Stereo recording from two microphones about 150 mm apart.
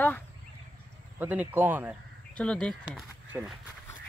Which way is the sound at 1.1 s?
15° right (ahead or behind).